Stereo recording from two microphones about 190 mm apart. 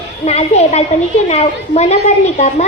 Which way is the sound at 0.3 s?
35° left (ahead or behind).